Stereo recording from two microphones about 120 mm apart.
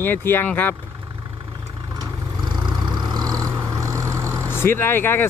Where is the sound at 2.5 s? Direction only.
35° right (ahead or behind).